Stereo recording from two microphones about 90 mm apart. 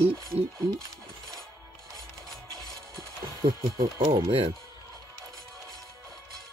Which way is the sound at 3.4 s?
60° right (ahead or behind).